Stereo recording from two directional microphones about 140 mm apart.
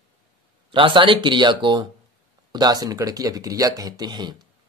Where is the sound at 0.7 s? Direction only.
35° right (ahead or behind).